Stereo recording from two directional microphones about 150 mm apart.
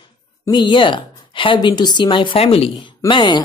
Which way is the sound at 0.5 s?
30° left (ahead or behind).